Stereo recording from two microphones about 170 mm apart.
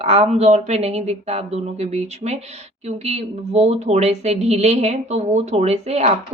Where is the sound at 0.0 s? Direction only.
35° right (ahead or behind).